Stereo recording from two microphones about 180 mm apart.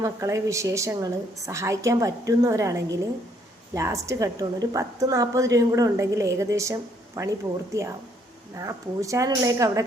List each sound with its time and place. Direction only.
0.0 s a woman's voice: 15° right (ahead or behind)